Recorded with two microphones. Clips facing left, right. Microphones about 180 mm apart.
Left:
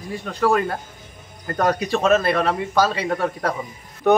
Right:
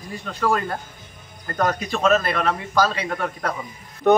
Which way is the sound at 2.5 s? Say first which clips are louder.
Left 1 dB; 15° left (ahead or behind).